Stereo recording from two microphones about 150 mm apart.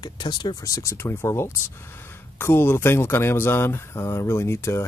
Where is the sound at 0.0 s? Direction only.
30° left (ahead or behind).